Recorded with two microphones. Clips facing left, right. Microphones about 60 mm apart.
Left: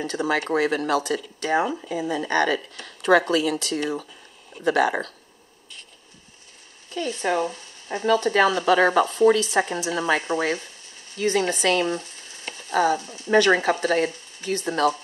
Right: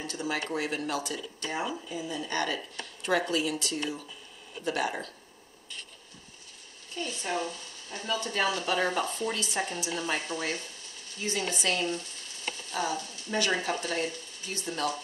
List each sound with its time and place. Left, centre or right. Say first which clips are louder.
0.0 s speech: left 9 dB; left
4.6 s speech: left 10 dB; left
7.1 s speech: left 9 dB; left
12.7 s speech: left 12 dB; left